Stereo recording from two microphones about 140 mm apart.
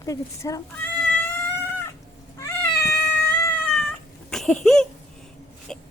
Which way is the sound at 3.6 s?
Centre (ahead or behind).